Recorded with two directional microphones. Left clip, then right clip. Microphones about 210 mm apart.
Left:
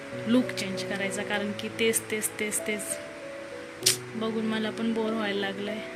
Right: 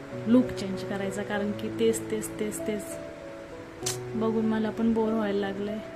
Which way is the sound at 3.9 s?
30° right (ahead or behind).